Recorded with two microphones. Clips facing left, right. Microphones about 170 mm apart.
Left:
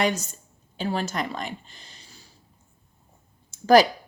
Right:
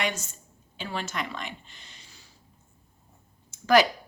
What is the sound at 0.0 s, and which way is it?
A woman's voice, 35° left (ahead or behind).